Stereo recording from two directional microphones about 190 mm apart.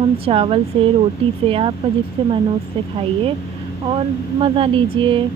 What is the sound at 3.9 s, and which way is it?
Speech, 30° right (ahead or behind).